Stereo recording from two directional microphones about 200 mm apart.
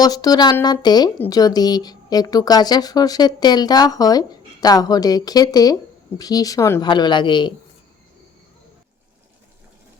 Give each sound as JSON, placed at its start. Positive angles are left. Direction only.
{"t": 0.0, "sound": "speech", "side_deg": 20}